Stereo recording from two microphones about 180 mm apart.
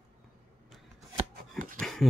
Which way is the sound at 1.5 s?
50° right (ahead or behind).